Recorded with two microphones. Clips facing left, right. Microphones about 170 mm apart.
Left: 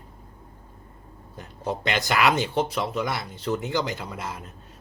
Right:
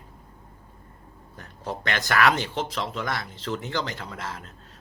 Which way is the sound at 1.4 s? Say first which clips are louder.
Left 4 dB; 15° left (ahead or behind).